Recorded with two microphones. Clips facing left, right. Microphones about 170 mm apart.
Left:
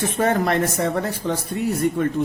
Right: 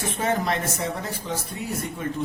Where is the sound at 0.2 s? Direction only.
60° left (ahead or behind).